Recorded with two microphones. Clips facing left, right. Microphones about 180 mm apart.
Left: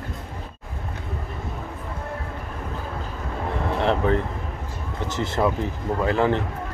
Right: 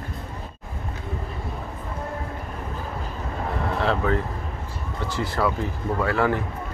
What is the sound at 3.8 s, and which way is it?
Speech, 20° left (ahead or behind).